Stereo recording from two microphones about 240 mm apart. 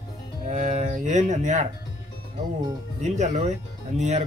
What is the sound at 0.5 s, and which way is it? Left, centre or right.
Cattle, right.